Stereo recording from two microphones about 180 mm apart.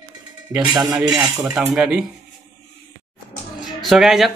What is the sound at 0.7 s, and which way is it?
Cutlery, 20° right (ahead or behind).